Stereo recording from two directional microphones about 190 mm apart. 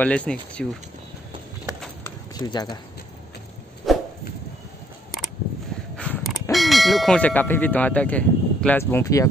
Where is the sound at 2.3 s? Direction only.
20° left (ahead or behind).